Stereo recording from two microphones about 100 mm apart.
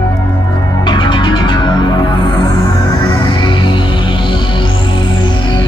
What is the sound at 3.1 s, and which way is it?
Music, 50° left (ahead or behind).